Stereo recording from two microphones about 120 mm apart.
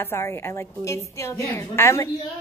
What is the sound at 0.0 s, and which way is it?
A woman's voice, 20° left (ahead or behind).